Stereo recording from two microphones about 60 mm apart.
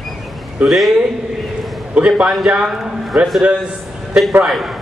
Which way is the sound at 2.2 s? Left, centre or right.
Centre.